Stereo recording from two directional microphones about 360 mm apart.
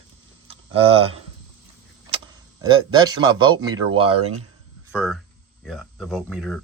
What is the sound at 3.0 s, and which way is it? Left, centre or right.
Speech, centre.